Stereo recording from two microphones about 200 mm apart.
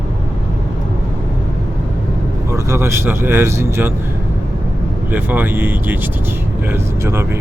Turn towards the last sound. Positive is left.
turn(degrees=-10)  # may be behind; listen again after turning